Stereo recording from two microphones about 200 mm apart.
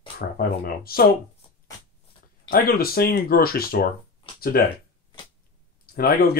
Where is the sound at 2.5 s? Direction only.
50° left (ahead or behind).